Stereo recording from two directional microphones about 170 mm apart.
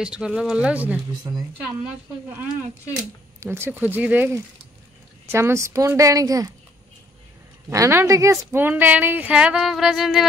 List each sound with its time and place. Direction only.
0.0 s speech: 5° right (ahead or behind)
3.3 s speech: 15° right (ahead or behind)
7.7 s speech: 15° right (ahead or behind)